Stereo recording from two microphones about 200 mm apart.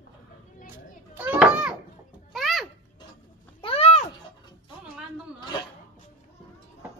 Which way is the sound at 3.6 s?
30° left (ahead or behind).